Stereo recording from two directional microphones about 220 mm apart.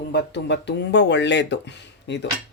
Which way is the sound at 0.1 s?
50° left (ahead or behind).